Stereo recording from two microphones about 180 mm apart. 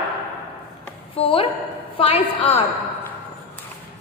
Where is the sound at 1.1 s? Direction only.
30° left (ahead or behind).